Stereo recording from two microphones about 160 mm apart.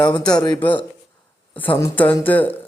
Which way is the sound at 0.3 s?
25° left (ahead or behind).